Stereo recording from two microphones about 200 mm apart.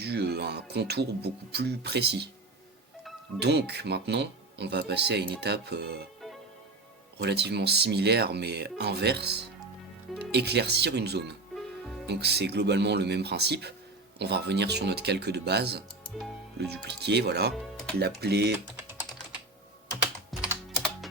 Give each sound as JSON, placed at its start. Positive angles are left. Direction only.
{"t": 0.0, "sound": "speech", "side_deg": -55}
{"t": 3.0, "sound": "music", "side_deg": 0}
{"t": 3.4, "sound": "speech", "side_deg": -55}
{"t": 7.2, "sound": "speech", "side_deg": -55}
{"t": 11.5, "sound": "music", "side_deg": 0}
{"t": 12.0, "sound": "speech", "side_deg": -55}
{"t": 17.5, "sound": "speech", "side_deg": 0}
{"t": 18.0, "sound": "speech", "side_deg": -55}
{"t": 20.3, "sound": "typing", "side_deg": 0}